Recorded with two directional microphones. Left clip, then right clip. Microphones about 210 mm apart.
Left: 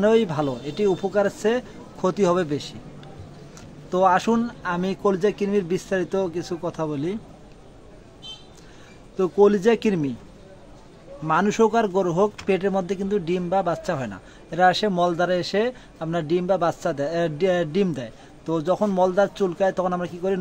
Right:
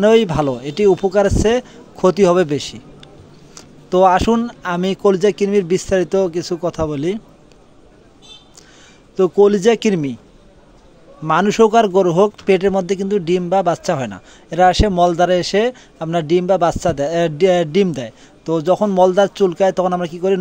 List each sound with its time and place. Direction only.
0.0 s a man's voice: 35° right (ahead or behind)
9.1 s a man's voice: 35° right (ahead or behind)
11.2 s a man's voice: 30° right (ahead or behind)